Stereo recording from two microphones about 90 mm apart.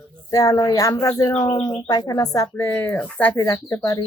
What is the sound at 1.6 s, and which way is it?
A woman's voice, 55° left (ahead or behind).